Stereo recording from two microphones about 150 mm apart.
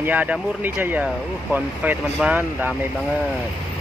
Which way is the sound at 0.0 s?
10° right (ahead or behind).